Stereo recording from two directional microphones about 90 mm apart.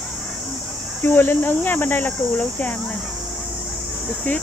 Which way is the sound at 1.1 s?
25° left (ahead or behind).